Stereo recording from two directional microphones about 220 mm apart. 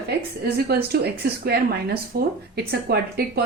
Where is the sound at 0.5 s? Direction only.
45° right (ahead or behind).